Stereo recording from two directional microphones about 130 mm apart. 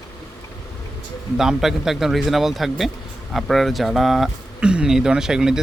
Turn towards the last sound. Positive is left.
turn(degrees=-5)  # may be behind; listen again after turning